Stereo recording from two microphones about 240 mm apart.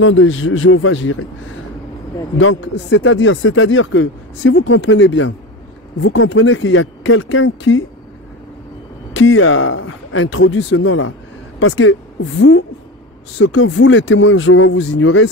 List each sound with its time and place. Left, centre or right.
0.0 s speech: left
2.3 s speech: left
9.1 s speech: left